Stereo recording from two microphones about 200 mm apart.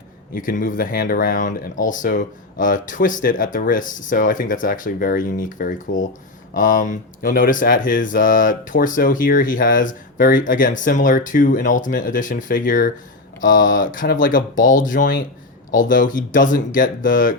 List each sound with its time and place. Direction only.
0.3 s speech: 45° left (ahead or behind)